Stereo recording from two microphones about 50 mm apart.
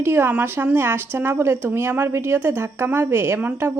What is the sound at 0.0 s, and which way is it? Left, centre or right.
A woman's voice, right.